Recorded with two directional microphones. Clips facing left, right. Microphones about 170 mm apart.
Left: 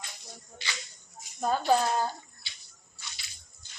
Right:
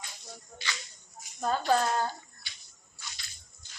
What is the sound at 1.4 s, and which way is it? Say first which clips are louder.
Speech: left 1 dB; 15° left (ahead or behind).